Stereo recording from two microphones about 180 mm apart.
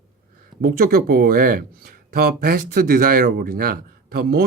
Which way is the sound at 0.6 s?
55° right (ahead or behind).